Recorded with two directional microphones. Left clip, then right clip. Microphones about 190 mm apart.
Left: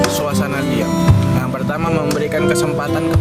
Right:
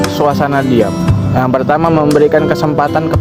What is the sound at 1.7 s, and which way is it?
Speech, 40° right (ahead or behind).